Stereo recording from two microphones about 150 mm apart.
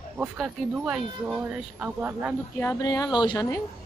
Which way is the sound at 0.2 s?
5° right (ahead or behind).